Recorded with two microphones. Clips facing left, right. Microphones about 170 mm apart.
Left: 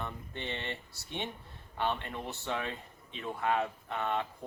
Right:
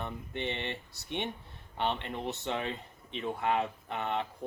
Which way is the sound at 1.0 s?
65° right (ahead or behind).